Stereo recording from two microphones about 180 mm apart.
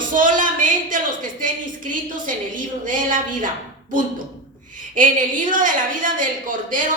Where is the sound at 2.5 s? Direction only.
50° right (ahead or behind).